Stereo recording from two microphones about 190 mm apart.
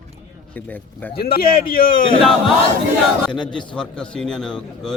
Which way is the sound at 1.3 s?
50° left (ahead or behind).